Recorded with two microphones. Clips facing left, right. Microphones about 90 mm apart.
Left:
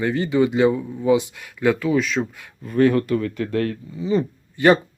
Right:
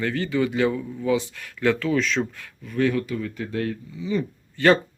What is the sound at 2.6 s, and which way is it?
Speech, 40° left (ahead or behind).